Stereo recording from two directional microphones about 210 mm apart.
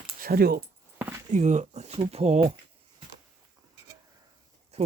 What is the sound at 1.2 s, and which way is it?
Speech, 35° right (ahead or behind).